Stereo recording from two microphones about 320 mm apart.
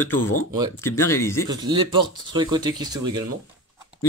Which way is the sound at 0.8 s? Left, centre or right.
Centre.